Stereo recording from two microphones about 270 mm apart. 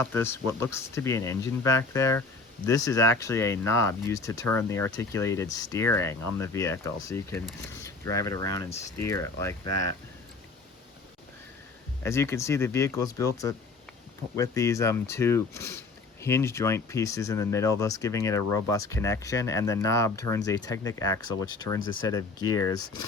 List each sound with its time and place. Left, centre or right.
0.0 s speech: centre
12.0 s speech: centre